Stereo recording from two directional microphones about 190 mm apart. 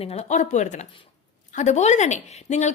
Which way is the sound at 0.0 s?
35° left (ahead or behind).